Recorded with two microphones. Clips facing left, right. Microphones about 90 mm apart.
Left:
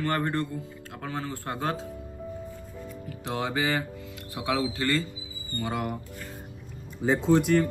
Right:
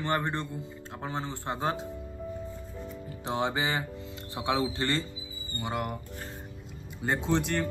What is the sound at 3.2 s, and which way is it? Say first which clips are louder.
A man's voice: left 1 dB; 25° right (ahead or behind).